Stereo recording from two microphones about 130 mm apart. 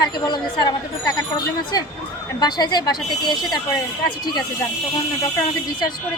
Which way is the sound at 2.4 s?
30° left (ahead or behind).